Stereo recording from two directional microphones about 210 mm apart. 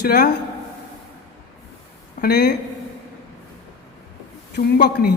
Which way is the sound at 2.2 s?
50° left (ahead or behind).